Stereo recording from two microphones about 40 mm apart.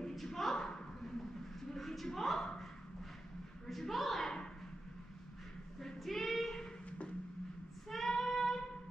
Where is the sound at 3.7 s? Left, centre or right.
Centre.